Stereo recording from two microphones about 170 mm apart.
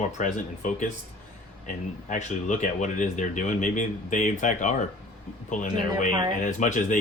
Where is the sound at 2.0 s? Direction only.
45° left (ahead or behind).